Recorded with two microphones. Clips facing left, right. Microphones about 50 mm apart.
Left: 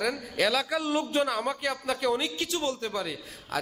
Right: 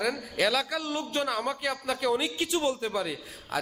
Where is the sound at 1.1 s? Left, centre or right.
Centre.